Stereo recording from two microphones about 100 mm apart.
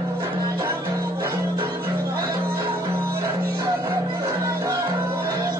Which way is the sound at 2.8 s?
35° right (ahead or behind).